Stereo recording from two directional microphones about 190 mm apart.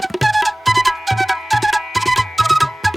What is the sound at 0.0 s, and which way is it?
Music, centre (ahead or behind).